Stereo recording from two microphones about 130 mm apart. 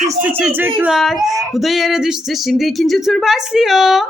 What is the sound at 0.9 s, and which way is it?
Speech, centre (ahead or behind).